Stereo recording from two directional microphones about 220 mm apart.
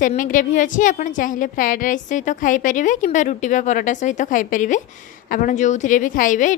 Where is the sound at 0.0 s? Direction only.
35° left (ahead or behind).